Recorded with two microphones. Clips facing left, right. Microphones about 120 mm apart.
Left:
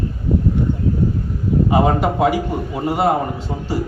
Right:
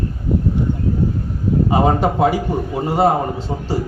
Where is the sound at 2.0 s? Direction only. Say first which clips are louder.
Right 1 dB; 30° right (ahead or behind).